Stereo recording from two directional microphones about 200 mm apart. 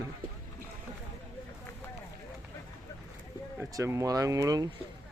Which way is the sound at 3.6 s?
15° right (ahead or behind).